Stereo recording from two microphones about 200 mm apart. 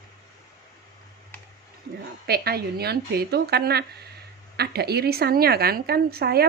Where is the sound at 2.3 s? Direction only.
50° right (ahead or behind).